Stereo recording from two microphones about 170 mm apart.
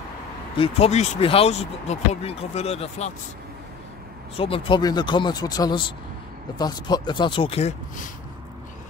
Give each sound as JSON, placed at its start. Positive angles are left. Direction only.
{"t": 0.6, "sound": "speech", "side_deg": 35}
{"t": 4.4, "sound": "speech", "side_deg": 30}